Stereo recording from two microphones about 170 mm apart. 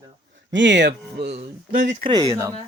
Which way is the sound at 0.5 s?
90° right.